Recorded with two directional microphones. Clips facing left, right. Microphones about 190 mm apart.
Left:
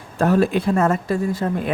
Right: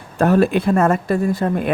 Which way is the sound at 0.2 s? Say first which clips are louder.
Right 2 dB; 60° right (ahead or behind).